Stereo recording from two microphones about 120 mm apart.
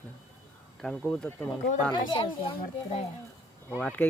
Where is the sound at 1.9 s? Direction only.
45° left (ahead or behind).